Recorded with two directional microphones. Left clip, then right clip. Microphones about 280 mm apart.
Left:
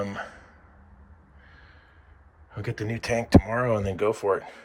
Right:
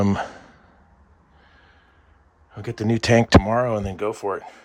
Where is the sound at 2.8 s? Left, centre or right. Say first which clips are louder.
Right 9 dB; right.